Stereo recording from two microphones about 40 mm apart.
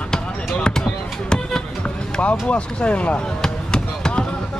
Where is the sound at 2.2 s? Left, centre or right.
Left.